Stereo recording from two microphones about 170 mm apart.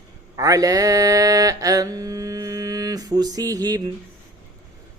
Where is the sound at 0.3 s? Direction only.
20° right (ahead or behind).